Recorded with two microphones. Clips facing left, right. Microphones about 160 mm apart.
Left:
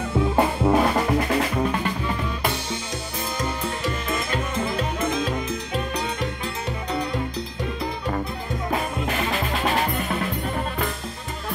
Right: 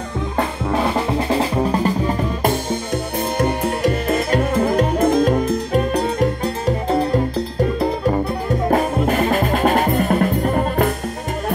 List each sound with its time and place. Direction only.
0.4 s music: 10° left (ahead or behind)
0.9 s drum: 25° right (ahead or behind); by 2.8 s 45° right (ahead or behind)
3.3 s music: 60° right (ahead or behind)
4.9 s music: 40° right (ahead or behind)
8.6 s music: 45° right (ahead or behind)